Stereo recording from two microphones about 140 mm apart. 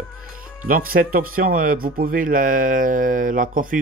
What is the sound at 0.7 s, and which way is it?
Speech, 85° right.